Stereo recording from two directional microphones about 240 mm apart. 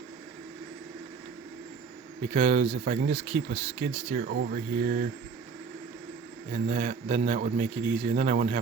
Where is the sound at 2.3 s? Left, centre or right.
Right.